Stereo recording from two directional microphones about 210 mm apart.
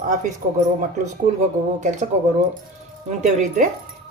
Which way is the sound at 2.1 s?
30° right (ahead or behind).